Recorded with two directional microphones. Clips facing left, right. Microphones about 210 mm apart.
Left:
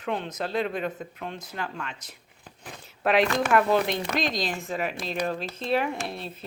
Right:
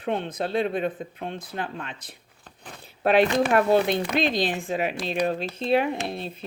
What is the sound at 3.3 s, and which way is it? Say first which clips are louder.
Speech: right 2 dB; 30° right (ahead or behind).